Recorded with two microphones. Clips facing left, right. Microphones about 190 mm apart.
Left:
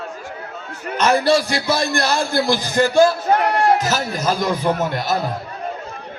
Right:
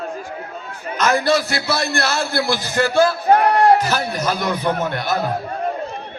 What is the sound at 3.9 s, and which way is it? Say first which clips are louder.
A man's voice: even; 10° left (ahead or behind).